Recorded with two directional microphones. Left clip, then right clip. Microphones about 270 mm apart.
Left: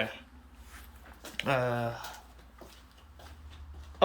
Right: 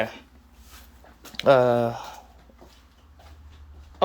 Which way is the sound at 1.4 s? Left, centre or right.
Centre.